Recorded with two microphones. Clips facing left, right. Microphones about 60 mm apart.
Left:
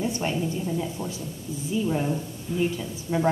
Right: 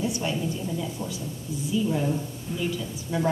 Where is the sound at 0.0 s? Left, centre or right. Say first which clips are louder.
Left 1 dB; left.